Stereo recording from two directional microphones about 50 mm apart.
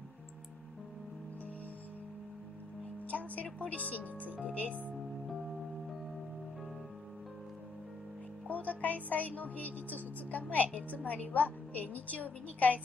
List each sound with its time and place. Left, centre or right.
3.1 s speech: left
8.5 s speech: left